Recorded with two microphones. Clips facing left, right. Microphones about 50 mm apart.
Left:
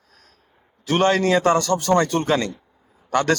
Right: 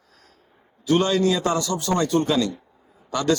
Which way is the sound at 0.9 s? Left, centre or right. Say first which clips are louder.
Left 2 dB; left.